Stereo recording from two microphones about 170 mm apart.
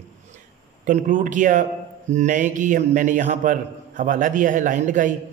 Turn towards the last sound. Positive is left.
turn(degrees=-50)  # may be behind; listen again after turning